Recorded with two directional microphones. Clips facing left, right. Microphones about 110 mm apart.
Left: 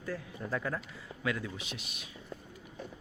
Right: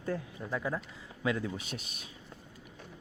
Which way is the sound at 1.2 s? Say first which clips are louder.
Right 3 dB; 25° right (ahead or behind).